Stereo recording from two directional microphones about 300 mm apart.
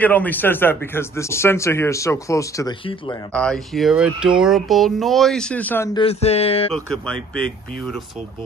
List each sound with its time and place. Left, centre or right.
0.0 s speech: centre
3.3 s speech: centre
5.9 s a sound: centre
7.3 s speech: centre